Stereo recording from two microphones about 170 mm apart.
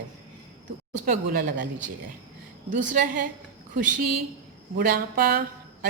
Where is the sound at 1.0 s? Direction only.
55° right (ahead or behind).